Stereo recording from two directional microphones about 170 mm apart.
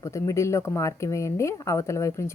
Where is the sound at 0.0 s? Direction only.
20° left (ahead or behind).